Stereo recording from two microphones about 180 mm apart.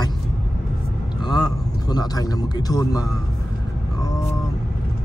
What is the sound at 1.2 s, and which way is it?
Speech, 25° left (ahead or behind).